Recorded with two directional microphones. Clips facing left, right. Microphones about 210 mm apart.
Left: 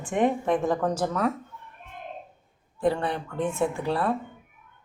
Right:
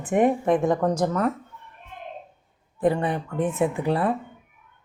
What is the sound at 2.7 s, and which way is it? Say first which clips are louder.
Speech: right 3 dB; 20° right (ahead or behind).